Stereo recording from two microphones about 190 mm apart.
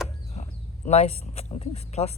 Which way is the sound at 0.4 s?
35° left (ahead or behind).